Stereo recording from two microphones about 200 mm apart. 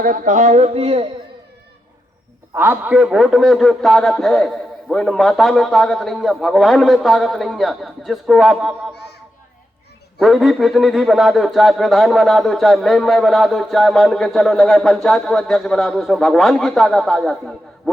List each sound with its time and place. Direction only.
0.0 s speech: 40° right (ahead or behind)
2.5 s a man's voice: 10° right (ahead or behind)
10.2 s a man's voice: centre (ahead or behind)